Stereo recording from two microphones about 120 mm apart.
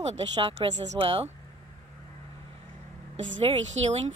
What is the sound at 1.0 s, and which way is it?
Speech, 50° right (ahead or behind).